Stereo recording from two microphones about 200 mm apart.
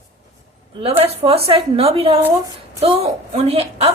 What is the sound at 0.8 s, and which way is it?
A woman's voice, 30° right (ahead or behind).